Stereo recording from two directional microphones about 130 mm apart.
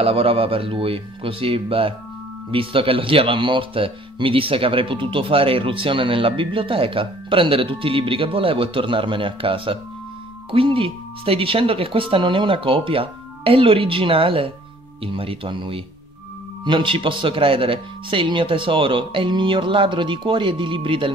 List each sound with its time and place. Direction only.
0.0 s speech: 45° right (ahead or behind)